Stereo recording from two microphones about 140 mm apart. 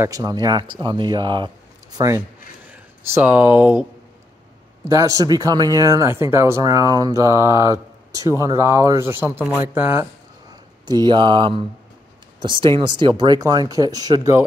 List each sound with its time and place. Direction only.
0.0 s speech: 25° right (ahead or behind)
4.8 s speech: 25° right (ahead or behind)
10.5 s speech: 30° right (ahead or behind)